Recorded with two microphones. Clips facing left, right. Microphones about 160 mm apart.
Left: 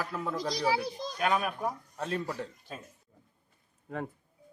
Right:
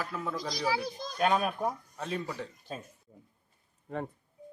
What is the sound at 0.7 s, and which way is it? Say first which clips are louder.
Speech: left 1 dB; 25° left (ahead or behind).